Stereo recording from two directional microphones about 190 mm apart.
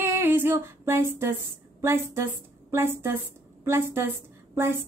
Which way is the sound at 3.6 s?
10° right (ahead or behind).